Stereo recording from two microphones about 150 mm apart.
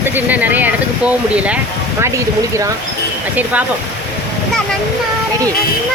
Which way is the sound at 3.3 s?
10° right (ahead or behind).